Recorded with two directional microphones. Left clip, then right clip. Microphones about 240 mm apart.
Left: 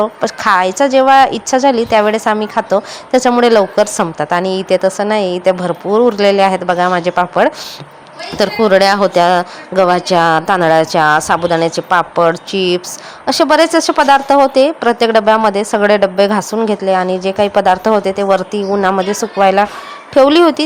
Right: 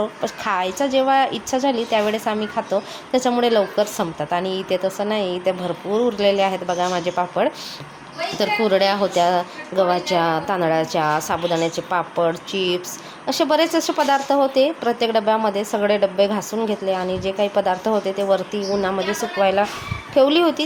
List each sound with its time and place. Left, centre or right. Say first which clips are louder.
0.0 s a woman's voice: left 10 dB; left